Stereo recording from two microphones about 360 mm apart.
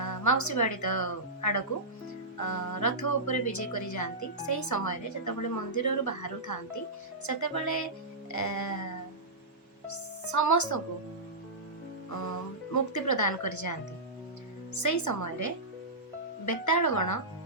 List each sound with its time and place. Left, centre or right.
0.0 s speech: left
9.9 s a woman's voice: left
12.7 s speech: left